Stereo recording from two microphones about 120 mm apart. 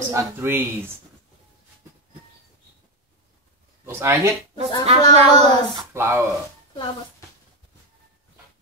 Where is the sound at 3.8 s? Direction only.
25° right (ahead or behind).